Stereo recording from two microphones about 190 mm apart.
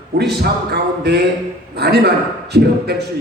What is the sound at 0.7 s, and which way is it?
A man's voice, 60° right (ahead or behind).